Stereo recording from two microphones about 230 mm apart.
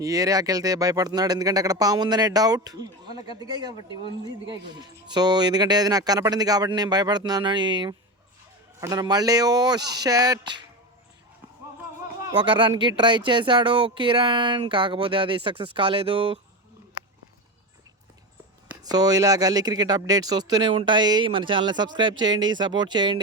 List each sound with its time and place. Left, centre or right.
0.0 s speech: centre
4.8 s speech: centre
12.4 s speech: right
18.7 s speech: centre